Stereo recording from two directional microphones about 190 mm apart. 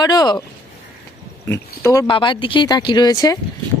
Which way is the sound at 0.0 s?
20° left (ahead or behind).